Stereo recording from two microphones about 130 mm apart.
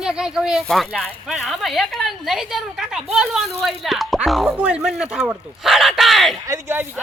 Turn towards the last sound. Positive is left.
turn(degrees=-20)  # may be behind; listen again after turning